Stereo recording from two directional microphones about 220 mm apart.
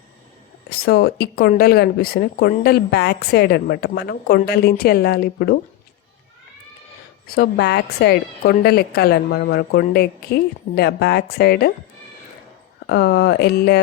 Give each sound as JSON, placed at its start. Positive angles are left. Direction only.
{"t": 0.7, "sound": "a woman's voice", "side_deg": 45}
{"t": 7.3, "sound": "a woman's voice", "side_deg": 45}
{"t": 12.9, "sound": "a woman's voice", "side_deg": 50}